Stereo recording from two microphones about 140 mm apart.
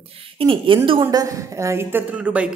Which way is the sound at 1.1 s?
25° right (ahead or behind).